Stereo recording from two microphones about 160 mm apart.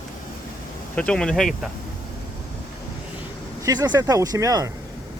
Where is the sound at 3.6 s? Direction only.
25° right (ahead or behind).